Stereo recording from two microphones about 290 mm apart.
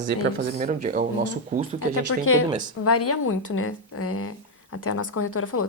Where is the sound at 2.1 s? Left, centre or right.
Left.